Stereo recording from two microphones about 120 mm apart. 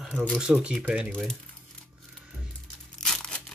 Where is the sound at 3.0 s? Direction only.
5° left (ahead or behind).